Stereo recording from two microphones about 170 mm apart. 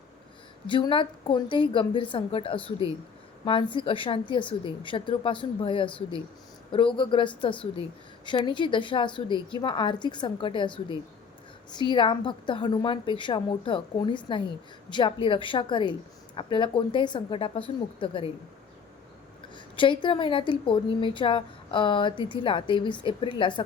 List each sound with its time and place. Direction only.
0.7 s a woman's voice: 30° left (ahead or behind)
19.5 s a woman's voice: 30° left (ahead or behind)